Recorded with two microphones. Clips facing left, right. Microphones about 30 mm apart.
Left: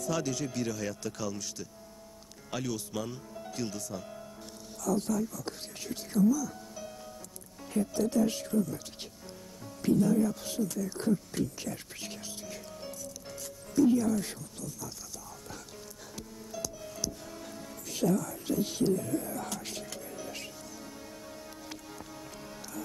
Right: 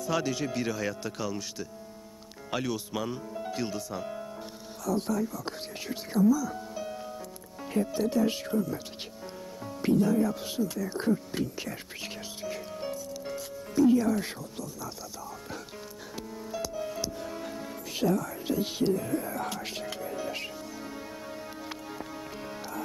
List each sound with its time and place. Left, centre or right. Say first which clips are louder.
0.0 s speech: right 3 dB; right
16.5 s music: right 7 dB; right